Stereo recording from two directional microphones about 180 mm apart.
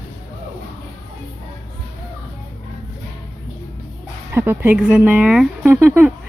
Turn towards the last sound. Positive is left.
turn(degrees=-10)  # may be behind; listen again after turning